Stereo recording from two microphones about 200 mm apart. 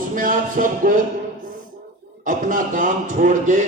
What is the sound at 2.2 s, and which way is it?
A man's voice, 40° right (ahead or behind).